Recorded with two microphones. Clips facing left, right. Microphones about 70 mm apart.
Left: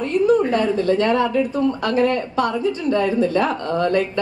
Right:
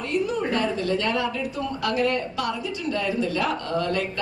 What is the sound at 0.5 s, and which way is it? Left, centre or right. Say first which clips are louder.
Speech: left 6 dB; left.